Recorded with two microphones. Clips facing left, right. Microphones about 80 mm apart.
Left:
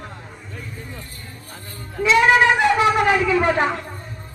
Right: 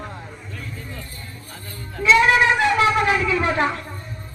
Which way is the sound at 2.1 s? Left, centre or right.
Left.